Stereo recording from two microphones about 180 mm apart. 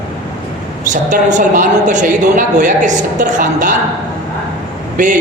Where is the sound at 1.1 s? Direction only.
45° right (ahead or behind).